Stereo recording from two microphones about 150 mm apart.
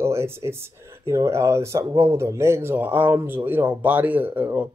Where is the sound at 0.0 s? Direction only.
15° right (ahead or behind).